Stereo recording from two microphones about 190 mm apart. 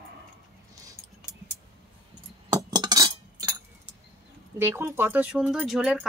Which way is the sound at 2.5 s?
20° right (ahead or behind).